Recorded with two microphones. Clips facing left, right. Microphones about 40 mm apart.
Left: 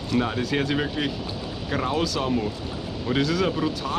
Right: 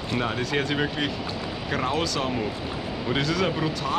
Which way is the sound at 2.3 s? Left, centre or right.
Centre.